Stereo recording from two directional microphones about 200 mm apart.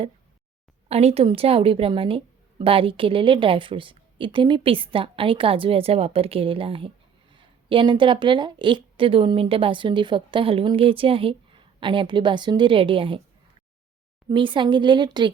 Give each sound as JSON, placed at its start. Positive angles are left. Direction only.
{"t": 0.9, "sound": "a woman's voice", "side_deg": -30}
{"t": 14.3, "sound": "a woman's voice", "side_deg": -25}